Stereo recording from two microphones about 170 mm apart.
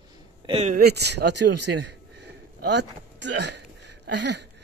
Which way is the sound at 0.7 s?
65° right (ahead or behind).